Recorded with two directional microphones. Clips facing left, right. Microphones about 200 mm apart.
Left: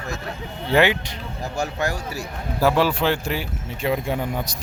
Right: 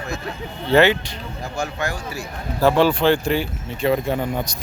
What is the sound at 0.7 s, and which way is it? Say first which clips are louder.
Speech: right 3 dB; 15° left (ahead or behind).